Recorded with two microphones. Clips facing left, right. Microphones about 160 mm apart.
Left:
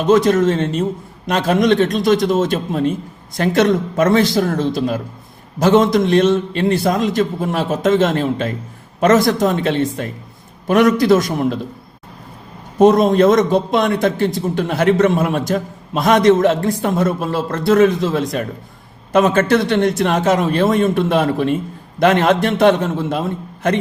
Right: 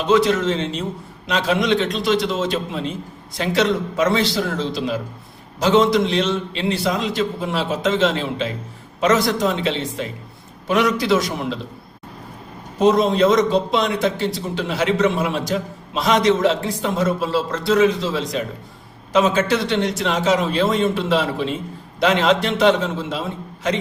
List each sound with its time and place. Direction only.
0.0 s a man's voice: 45° left (ahead or behind)
12.8 s a man's voice: 50° left (ahead or behind)